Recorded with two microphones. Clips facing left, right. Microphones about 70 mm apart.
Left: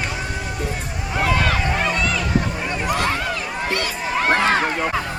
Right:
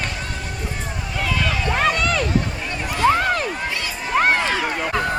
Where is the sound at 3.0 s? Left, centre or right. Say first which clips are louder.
Right 6 dB; right.